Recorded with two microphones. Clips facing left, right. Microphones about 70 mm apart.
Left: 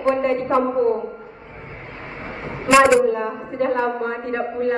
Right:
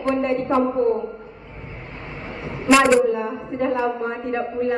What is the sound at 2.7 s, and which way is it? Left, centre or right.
Speech, centre.